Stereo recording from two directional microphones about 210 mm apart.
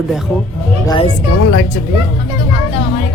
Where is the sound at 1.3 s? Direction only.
90° left.